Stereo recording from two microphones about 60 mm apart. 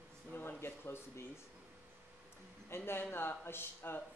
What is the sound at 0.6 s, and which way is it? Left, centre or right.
Speech, left.